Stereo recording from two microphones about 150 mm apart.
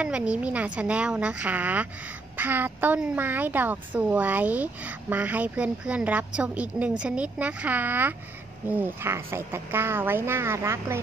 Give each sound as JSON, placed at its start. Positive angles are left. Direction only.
{"t": 0.0, "sound": "a woman's voice", "side_deg": -10}